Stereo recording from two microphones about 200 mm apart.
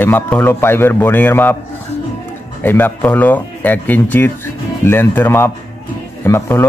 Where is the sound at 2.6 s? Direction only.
10° left (ahead or behind).